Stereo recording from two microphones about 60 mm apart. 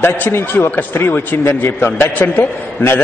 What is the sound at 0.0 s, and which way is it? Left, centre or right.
A man's voice, left.